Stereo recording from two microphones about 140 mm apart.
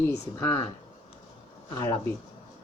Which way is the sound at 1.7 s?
25° left (ahead or behind).